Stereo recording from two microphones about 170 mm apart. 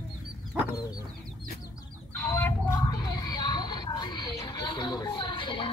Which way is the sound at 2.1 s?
10° left (ahead or behind).